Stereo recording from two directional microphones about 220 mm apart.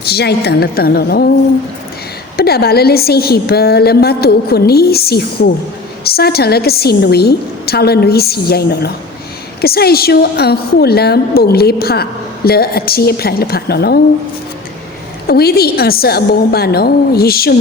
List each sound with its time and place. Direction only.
0.0 s a woman's voice: 45° left (ahead or behind)
2.3 s a woman's voice: 45° left (ahead or behind)
15.3 s a woman's voice: 45° left (ahead or behind)